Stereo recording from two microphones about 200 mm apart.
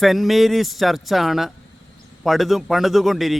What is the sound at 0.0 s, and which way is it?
A man's voice, centre (ahead or behind).